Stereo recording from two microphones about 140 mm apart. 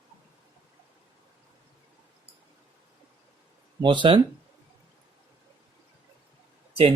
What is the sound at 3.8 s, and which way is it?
Speech, 35° right (ahead or behind).